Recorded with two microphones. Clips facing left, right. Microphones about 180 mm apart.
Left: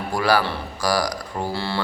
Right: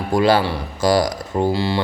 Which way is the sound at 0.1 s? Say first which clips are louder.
Right 5 dB; 25° right (ahead or behind).